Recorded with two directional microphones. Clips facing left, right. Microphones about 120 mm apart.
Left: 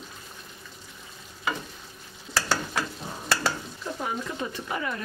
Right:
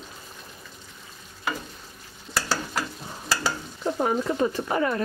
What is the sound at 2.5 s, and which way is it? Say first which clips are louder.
Stir: even; centre (ahead or behind).